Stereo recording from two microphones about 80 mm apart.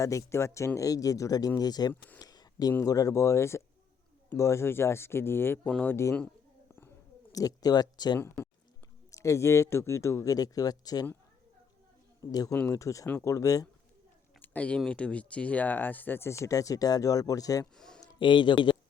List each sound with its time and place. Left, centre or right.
0.0 s speech: left
2.1 s a sound: left
2.8 s speech: left
6.7 s bird: left
7.3 s speech: left
9.0 s speech: left
12.2 s speech: left
14.4 s a sound: centre
14.8 s speech: centre; by 17.7 s left
17.7 s a sound: centre
18.2 s speech: left